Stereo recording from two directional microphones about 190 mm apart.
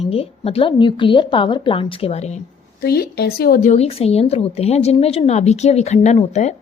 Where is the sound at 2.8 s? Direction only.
55° left (ahead or behind).